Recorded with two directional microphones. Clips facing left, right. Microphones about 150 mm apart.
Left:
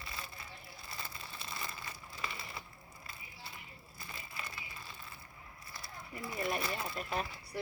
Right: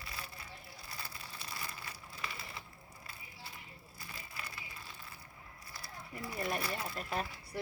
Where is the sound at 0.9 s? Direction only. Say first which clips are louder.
Left 2 dB; 10° right (ahead or behind).